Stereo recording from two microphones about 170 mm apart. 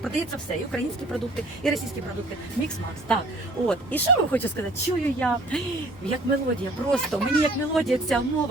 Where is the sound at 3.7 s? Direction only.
10° left (ahead or behind).